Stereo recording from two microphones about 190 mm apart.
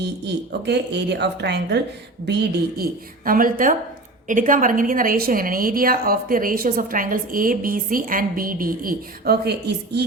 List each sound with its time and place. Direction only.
0.0 s a woman's voice: 60° right (ahead or behind)